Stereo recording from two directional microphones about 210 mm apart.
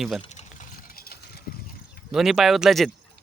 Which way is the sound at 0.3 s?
35° left (ahead or behind).